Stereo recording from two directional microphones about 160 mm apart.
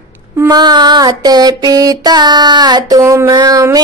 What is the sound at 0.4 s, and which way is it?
Child singing, 25° right (ahead or behind).